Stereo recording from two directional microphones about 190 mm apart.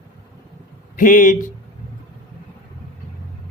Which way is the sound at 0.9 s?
45° left (ahead or behind).